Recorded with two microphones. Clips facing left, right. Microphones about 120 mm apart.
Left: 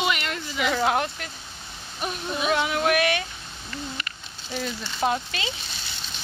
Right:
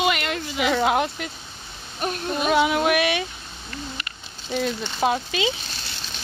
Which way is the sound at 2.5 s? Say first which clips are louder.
Right 4 dB; 15° right (ahead or behind).